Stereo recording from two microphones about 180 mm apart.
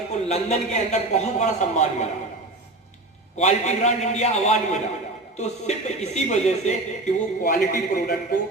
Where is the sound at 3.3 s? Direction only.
40° left (ahead or behind).